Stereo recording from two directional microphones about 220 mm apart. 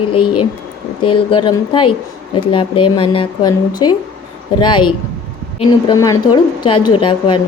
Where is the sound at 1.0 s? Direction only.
25° left (ahead or behind).